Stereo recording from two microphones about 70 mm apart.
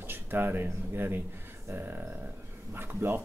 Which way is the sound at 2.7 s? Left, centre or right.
Right.